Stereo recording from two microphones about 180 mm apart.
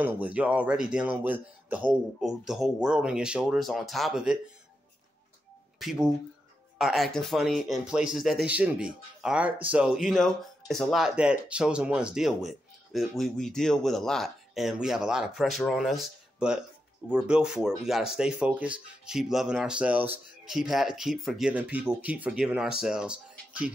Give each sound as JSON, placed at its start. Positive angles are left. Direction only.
{"t": 0.0, "sound": "speech", "side_deg": -10}
{"t": 5.8, "sound": "speech", "side_deg": 0}